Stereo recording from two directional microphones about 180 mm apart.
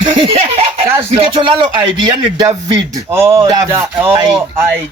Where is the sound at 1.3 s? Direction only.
25° right (ahead or behind).